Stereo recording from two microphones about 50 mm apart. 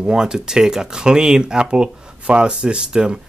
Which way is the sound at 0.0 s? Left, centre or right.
Centre.